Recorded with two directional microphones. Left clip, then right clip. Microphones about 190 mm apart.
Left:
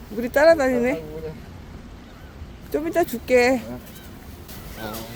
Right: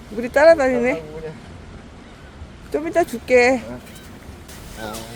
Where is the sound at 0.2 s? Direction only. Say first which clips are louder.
Right 3 dB; 5° right (ahead or behind).